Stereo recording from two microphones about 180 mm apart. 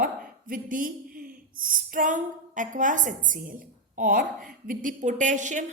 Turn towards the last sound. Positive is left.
turn(degrees=-45)  # may be behind; listen again after turning